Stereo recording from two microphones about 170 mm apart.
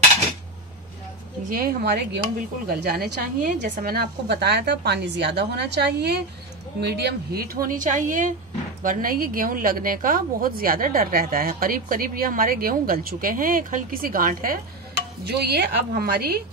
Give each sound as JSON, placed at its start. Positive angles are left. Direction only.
{"t": 1.5, "sound": "a woman's voice", "side_deg": -60}
{"t": 3.6, "sound": "a woman's voice", "side_deg": -55}
{"t": 15.2, "sound": "a woman's voice", "side_deg": -70}